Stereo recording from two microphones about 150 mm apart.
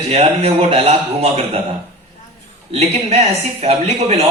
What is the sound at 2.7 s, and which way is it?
A man's voice, 45° right (ahead or behind).